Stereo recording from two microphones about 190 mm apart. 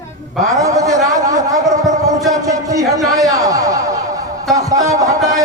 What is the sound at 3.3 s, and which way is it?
Chuckle, 20° right (ahead or behind).